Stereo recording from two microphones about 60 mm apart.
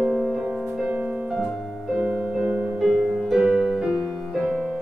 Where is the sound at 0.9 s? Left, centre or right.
Right.